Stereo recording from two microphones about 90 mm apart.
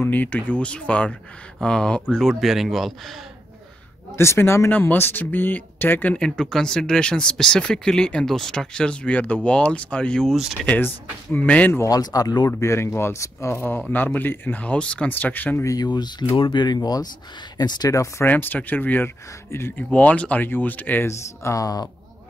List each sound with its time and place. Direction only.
0.0 s speech: 20° left (ahead or behind); by 2.9 s centre (ahead or behind)
4.2 s speech: 30° left (ahead or behind)
6.1 s speech: 10° left (ahead or behind)
11.3 s speech: 15° left (ahead or behind)
11.8 s speech: 45° left (ahead or behind)
12.4 s speech: 30° left (ahead or behind)
15.6 s speech: 40° left (ahead or behind)
15.9 s speech: 55° left (ahead or behind)
18.2 s speech: 20° left (ahead or behind)
19.9 s speech: 15° left (ahead or behind)
21.1 s speech: 35° left (ahead or behind)